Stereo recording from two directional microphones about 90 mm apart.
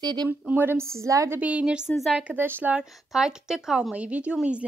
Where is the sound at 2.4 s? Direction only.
25° right (ahead or behind).